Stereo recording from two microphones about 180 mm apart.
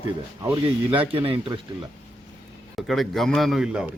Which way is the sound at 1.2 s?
30° right (ahead or behind).